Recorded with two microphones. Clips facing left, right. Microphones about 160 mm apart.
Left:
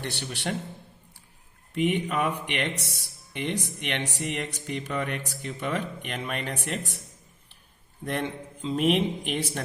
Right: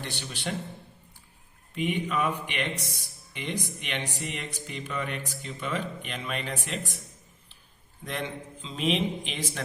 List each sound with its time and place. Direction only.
0.0 s speech: 70° left (ahead or behind)
1.7 s speech: 65° left (ahead or behind)
8.6 s speech: 55° left (ahead or behind)